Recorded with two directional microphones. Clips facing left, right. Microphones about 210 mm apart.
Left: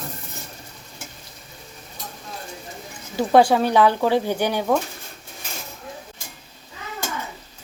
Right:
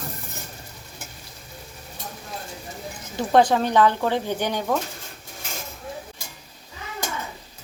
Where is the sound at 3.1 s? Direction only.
10° left (ahead or behind).